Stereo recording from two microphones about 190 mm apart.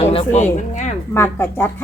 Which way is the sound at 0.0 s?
30° left (ahead or behind).